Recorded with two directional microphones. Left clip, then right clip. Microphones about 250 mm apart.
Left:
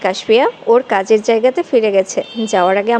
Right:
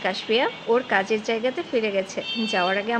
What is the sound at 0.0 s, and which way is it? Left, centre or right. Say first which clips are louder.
Speech: left 10 dB; left.